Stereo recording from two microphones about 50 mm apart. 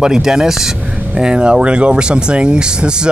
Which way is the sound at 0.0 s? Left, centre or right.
Centre.